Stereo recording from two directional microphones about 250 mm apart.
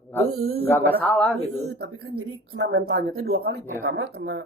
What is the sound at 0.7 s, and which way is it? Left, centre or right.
Speech, centre.